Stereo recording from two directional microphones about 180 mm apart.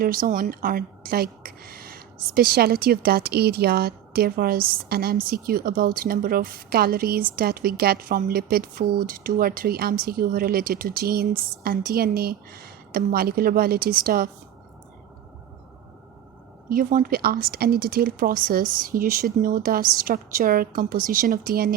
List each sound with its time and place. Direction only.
0.0 s a woman's voice: 50° right (ahead or behind)
16.6 s speech: 50° right (ahead or behind)